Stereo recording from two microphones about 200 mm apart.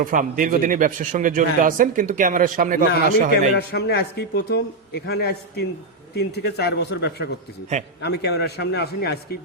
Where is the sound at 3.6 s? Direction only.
55° left (ahead or behind).